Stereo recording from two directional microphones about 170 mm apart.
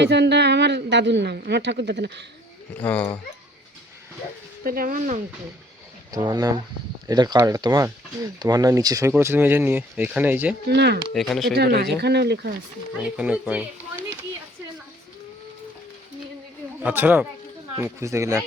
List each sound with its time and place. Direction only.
0.0 s speech: 85° right
2.7 s speech: 10° left (ahead or behind)
4.6 s speech: 60° right (ahead or behind)
6.1 s speech: 20° right (ahead or behind)
10.7 s speech: 80° right
11.1 s speech: centre (ahead or behind)
11.5 s speech: 70° right (ahead or behind)
13.0 s speech: 5° right (ahead or behind)
16.8 s speech: 10° right (ahead or behind)